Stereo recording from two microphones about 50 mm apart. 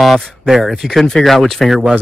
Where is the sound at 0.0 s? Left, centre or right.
Centre.